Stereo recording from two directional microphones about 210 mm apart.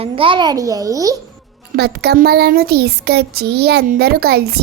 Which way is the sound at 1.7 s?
50° right (ahead or behind).